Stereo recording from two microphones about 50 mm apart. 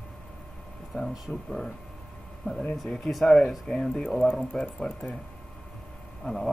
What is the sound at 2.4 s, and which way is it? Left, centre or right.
Speech, left.